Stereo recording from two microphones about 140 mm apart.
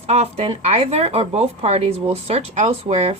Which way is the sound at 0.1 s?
50° right (ahead or behind).